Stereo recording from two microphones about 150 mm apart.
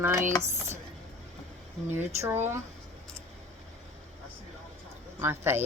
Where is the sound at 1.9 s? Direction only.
15° right (ahead or behind).